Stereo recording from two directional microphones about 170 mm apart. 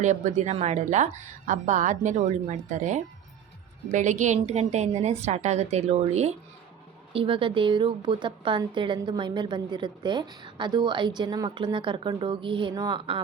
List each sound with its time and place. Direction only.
0.0 s a woman's voice: 45° right (ahead or behind); by 13.2 s 30° right (ahead or behind)